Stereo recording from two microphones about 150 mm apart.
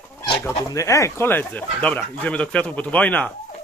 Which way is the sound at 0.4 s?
20° left (ahead or behind).